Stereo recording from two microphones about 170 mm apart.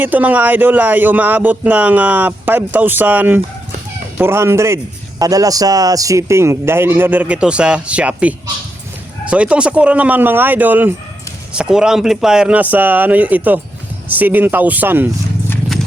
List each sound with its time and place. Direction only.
0.0 s speech: 10° right (ahead or behind)